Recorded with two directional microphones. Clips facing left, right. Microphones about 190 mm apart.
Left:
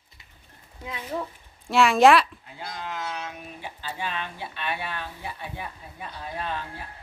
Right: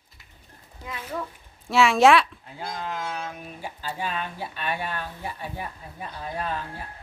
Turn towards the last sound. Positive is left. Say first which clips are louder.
# right 2 dB
turn(degrees=-40)  # may be behind; listen again after turning